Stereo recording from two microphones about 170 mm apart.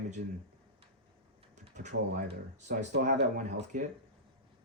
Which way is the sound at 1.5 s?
45° right (ahead or behind).